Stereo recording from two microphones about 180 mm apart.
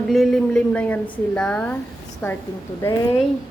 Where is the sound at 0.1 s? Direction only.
Centre (ahead or behind).